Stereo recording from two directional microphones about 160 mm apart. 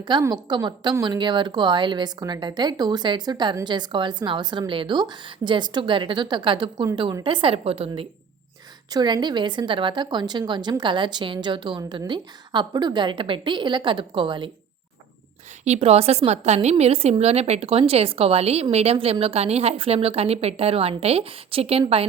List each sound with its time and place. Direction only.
0.1 s a woman's voice: 25° right (ahead or behind)
8.9 s a woman's voice: 25° right (ahead or behind)
15.6 s a woman's voice: 40° right (ahead or behind)